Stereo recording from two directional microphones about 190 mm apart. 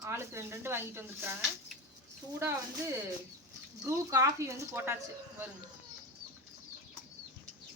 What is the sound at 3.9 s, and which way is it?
A woman's voice, 15° right (ahead or behind).